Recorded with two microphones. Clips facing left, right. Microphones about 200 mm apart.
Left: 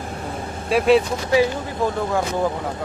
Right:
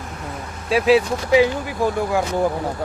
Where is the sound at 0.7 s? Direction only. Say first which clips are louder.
Even; centre (ahead or behind).